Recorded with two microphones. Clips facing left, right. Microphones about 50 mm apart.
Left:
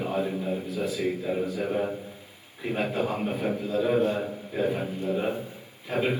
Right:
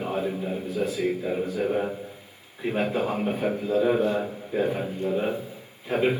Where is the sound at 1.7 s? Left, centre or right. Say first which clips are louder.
Right 1 dB; centre.